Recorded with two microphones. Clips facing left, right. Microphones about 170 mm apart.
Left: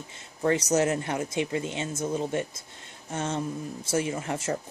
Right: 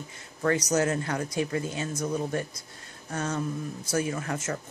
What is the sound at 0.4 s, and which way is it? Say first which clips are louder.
Speech: left 1 dB; 25° left (ahead or behind).